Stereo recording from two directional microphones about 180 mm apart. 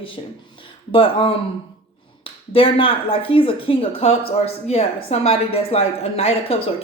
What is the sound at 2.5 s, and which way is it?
A woman's voice, 30° left (ahead or behind).